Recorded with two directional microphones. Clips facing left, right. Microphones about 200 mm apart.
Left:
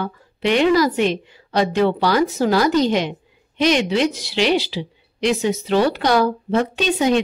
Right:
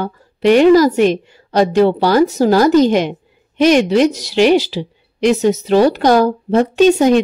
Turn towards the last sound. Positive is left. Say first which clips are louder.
# right 8 dB
turn(degrees=-45)  # may be behind; listen again after turning